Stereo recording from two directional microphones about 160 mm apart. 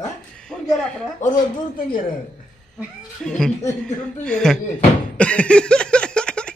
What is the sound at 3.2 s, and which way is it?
Speech, 5° left (ahead or behind).